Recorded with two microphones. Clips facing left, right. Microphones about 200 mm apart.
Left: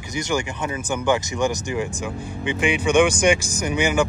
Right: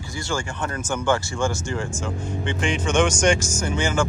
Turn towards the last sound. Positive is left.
turn(degrees=15)  # may be behind; listen again after turning